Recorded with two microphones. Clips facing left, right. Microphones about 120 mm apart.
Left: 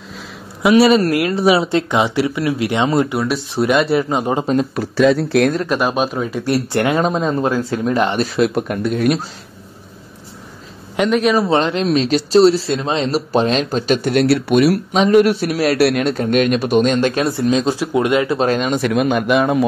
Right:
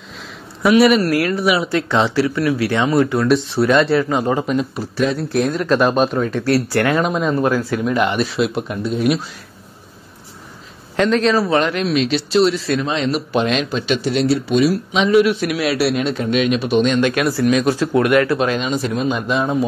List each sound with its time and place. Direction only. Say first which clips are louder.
0.7 s speech: left 1 dB; 30° left (ahead or behind)
3.2 s speech: right 4 dB; 5° left (ahead or behind)
3.5 s speech: left 3 dB; 15° left (ahead or behind)
4.7 s speech: left 6 dB; 90° left
5.7 s speech: right 3 dB; 5° left (ahead or behind)
6.4 s speech: left 1 dB; 20° left (ahead or behind)
7.1 s speech: even; 30° left (ahead or behind); by 9.2 s 50° left (ahead or behind)
11.0 s speech: even; 10° left (ahead or behind)
11.4 s speech: left 1 dB; 30° left (ahead or behind); by 15.0 s 60° left (ahead or behind)
15.0 s a man's voice: left 1 dB; 45° left (ahead or behind); by 18.4 s 20° left (ahead or behind)
18.4 s a man's voice: left 2 dB; 45° left (ahead or behind)
18.9 s speech: left 4 dB; 70° left (ahead or behind)